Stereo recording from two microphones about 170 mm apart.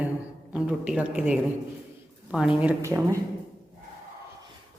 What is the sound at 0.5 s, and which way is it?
A woman's voice, 5° right (ahead or behind).